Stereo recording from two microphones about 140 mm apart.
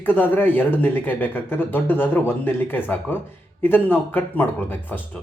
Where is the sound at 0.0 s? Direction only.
15° left (ahead or behind).